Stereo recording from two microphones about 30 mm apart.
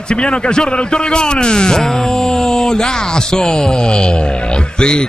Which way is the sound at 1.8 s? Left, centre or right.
Centre.